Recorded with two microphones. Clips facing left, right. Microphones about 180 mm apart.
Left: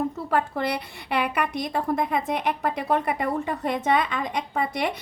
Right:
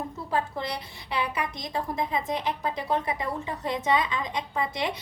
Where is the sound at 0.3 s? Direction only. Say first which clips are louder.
Left 2 dB; 65° left (ahead or behind).